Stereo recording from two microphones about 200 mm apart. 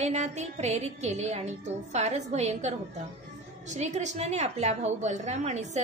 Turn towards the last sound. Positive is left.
turn(degrees=-35)  # may be behind; listen again after turning